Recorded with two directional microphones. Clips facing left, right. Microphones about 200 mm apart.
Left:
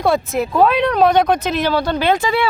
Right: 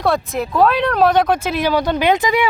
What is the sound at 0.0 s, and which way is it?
Speech, centre (ahead or behind).